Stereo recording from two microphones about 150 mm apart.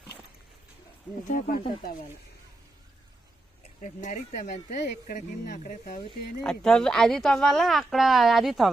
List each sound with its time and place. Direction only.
1.3 s speech: 60° left (ahead or behind)
3.8 s speech: 55° left (ahead or behind)
6.4 s speech: 5° left (ahead or behind)